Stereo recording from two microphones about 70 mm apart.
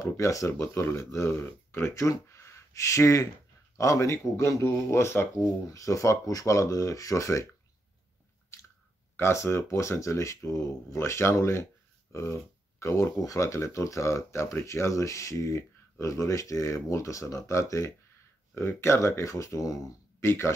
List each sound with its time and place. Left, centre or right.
0.0 s speech: left
5.4 s speech: left
8.5 s chewing: left
9.1 s speech: left
20.2 s speech: left